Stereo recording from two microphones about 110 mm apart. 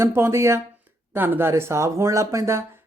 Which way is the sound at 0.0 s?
25° right (ahead or behind).